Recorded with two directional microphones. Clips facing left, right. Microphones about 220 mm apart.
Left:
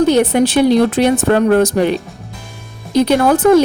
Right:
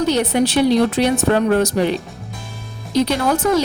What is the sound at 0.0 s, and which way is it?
A woman's voice, 50° left (ahead or behind).